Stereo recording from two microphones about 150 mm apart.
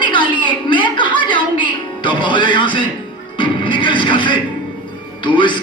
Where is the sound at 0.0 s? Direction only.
30° left (ahead or behind).